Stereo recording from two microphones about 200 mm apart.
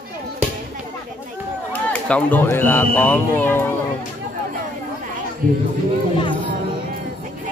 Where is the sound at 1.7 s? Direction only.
5° left (ahead or behind).